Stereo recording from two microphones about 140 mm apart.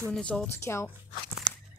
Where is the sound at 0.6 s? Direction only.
20° left (ahead or behind).